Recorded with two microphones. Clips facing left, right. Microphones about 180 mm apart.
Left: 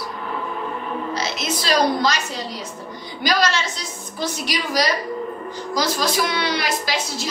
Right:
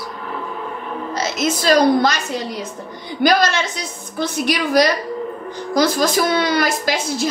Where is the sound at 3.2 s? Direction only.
55° right (ahead or behind).